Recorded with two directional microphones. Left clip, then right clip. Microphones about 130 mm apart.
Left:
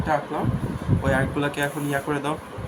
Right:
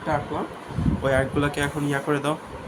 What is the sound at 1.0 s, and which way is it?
Speech, 25° right (ahead or behind).